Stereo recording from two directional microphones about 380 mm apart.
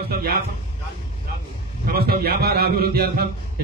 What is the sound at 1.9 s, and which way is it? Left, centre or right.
A man's voice, right.